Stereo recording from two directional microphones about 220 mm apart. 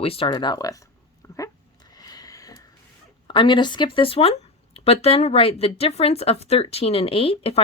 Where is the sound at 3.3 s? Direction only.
20° left (ahead or behind).